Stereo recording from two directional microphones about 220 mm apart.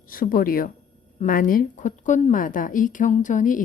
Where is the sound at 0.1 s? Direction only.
40° left (ahead or behind).